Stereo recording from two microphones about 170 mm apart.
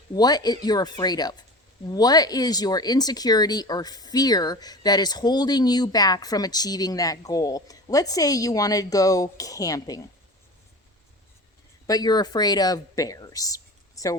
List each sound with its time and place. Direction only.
0.1 s speech: 25° left (ahead or behind)
11.9 s speech: 25° left (ahead or behind)